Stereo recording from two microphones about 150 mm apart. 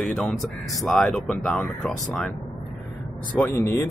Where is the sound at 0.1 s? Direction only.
5° left (ahead or behind).